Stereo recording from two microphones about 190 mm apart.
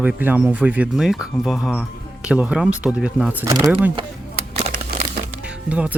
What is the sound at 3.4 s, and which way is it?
Speech, 20° right (ahead or behind).